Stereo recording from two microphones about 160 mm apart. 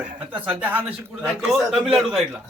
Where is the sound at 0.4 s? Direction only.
10° right (ahead or behind).